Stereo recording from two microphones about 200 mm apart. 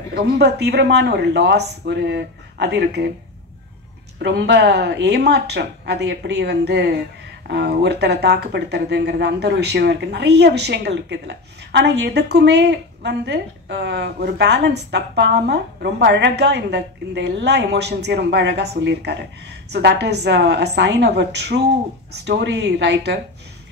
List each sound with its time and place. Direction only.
0.1 s speech: 55° right (ahead or behind)
4.2 s speech: 60° right (ahead or behind)